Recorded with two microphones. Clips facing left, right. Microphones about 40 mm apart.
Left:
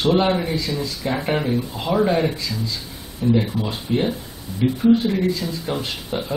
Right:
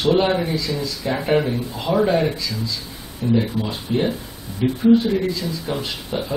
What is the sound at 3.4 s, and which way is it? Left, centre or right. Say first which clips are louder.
Speech: right 1 dB; centre.